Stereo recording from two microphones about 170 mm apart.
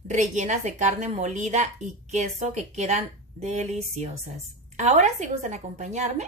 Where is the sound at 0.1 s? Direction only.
45° right (ahead or behind).